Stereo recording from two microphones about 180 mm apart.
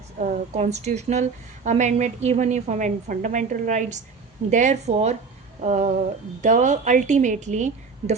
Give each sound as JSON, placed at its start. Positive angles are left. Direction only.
{"t": 0.2, "sound": "a woman's voice", "side_deg": -40}